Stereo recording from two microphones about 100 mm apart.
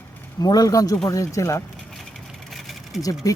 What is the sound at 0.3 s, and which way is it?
Speech, 40° left (ahead or behind).